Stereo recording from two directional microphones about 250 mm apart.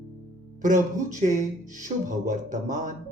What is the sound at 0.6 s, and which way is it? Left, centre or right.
Speech, right.